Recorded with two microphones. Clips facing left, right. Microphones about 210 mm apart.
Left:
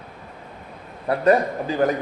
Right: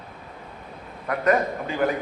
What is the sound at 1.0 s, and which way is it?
Speech, 30° left (ahead or behind).